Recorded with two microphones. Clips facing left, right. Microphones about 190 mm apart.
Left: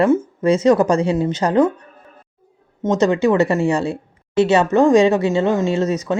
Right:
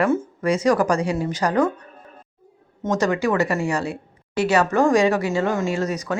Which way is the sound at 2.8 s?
20° left (ahead or behind).